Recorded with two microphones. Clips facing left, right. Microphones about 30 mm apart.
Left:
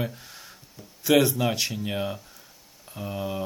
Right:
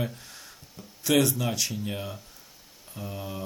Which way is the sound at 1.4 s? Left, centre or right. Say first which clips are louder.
Left 3 dB; left.